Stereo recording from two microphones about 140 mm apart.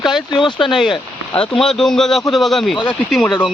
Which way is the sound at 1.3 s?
5° left (ahead or behind).